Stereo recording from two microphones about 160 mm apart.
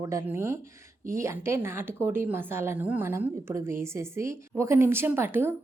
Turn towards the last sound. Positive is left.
turn(degrees=-15)  # may be behind; listen again after turning